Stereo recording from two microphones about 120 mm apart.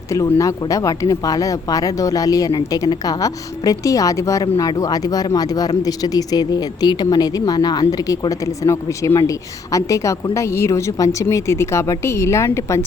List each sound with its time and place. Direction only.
0.1 s speech: 25° left (ahead or behind)